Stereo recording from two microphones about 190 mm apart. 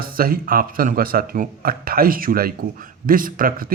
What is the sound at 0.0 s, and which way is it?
Speech, 50° right (ahead or behind).